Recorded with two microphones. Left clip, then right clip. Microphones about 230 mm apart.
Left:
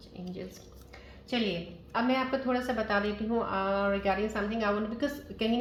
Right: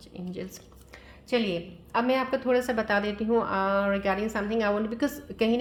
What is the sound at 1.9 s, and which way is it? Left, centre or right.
A woman's voice, right.